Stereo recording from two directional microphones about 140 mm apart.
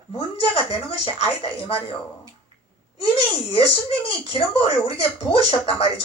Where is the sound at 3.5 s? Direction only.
40° left (ahead or behind).